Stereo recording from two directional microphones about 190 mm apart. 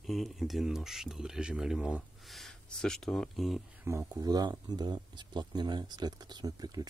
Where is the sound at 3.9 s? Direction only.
15° right (ahead or behind).